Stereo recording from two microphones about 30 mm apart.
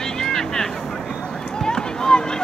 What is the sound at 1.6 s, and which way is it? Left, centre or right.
Run, left.